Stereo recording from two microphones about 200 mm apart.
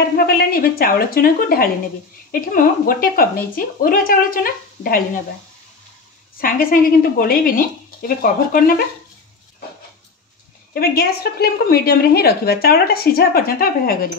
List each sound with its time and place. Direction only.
0.3 s a woman's voice: 50° left (ahead or behind)
6.4 s a woman's voice: 45° left (ahead or behind)
10.7 s a woman's voice: 50° left (ahead or behind)